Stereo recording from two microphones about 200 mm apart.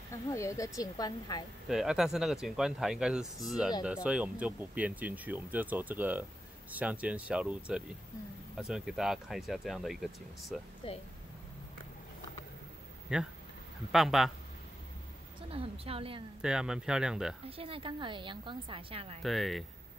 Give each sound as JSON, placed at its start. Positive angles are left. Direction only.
{"t": 0.1, "sound": "a woman's voice", "side_deg": 15}
{"t": 1.7, "sound": "speech", "side_deg": 0}
{"t": 13.1, "sound": "speech", "side_deg": -5}
{"t": 15.5, "sound": "a woman's voice", "side_deg": -30}
{"t": 16.3, "sound": "speech", "side_deg": -5}
{"t": 17.5, "sound": "a woman's voice", "side_deg": -30}
{"t": 19.2, "sound": "speech", "side_deg": 0}